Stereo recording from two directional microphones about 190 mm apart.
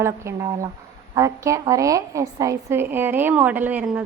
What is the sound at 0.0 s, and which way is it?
A woman's voice, 15° right (ahead or behind).